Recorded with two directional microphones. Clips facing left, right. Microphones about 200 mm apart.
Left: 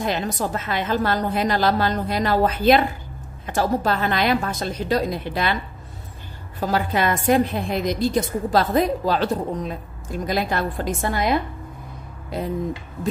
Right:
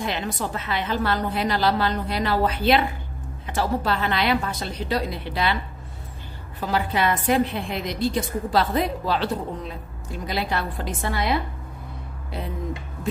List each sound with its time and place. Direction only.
0.0 s a woman's voice: 45° left (ahead or behind)
6.7 s a woman's voice: 45° left (ahead or behind)